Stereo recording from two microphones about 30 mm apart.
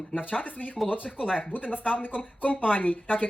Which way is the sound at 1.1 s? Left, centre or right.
Right.